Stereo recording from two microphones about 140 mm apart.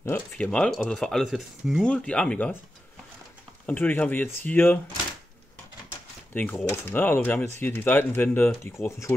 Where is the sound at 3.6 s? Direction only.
10° left (ahead or behind).